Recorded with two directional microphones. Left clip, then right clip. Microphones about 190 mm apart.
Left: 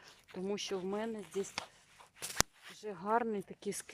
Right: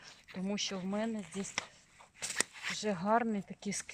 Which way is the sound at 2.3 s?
25° left (ahead or behind).